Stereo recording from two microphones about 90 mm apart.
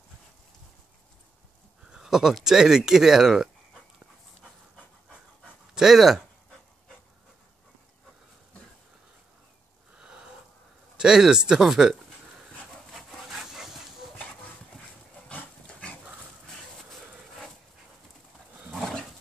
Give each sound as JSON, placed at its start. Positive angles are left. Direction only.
{"t": 1.9, "sound": "speech", "side_deg": -5}
{"t": 5.8, "sound": "speech", "side_deg": -5}
{"t": 9.9, "sound": "sniff", "side_deg": -10}
{"t": 11.0, "sound": "speech", "side_deg": -5}
{"t": 12.9, "sound": "wood", "side_deg": -5}
{"t": 15.2, "sound": "dog", "side_deg": 15}
{"t": 16.9, "sound": "a sound", "side_deg": 0}
{"t": 18.8, "sound": "roaring cats", "side_deg": 5}